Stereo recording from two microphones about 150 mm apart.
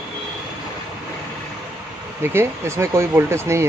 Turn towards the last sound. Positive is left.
turn(degrees=-15)  # may be behind; listen again after turning